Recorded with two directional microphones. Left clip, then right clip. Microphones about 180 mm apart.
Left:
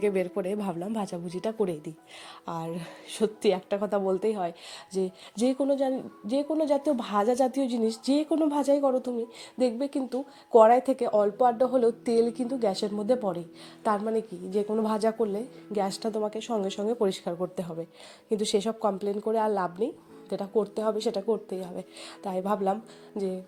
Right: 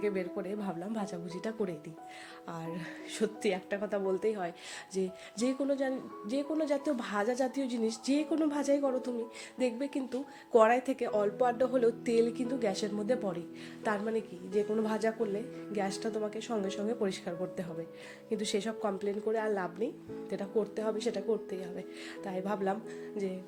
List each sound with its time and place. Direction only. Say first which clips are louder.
0.0 s a woman's voice: left 7 dB; 40° left (ahead or behind)